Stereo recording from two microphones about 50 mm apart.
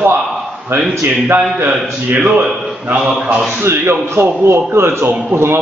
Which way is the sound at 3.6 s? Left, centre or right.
Right.